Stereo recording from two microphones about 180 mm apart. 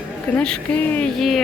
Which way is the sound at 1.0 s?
Centre (ahead or behind).